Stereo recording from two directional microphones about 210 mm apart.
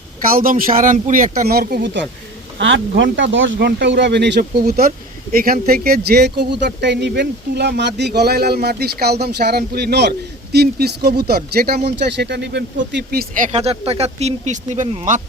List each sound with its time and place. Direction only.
0.3 s speech: 45° right (ahead or behind)